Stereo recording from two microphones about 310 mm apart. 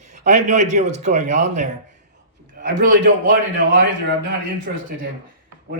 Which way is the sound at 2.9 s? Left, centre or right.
Right.